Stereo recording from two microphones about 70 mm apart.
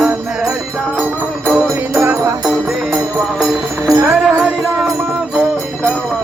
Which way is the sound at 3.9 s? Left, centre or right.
Right.